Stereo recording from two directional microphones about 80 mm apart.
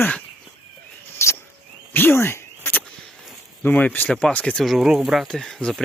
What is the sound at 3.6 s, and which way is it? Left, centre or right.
Speech, left.